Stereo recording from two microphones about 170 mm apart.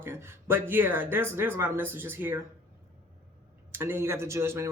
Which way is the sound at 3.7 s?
15° right (ahead or behind).